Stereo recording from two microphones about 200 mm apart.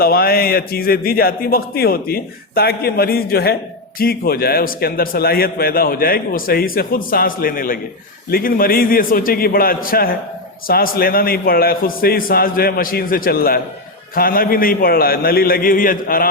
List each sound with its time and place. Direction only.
0.0 s a man's voice: 50° left (ahead or behind)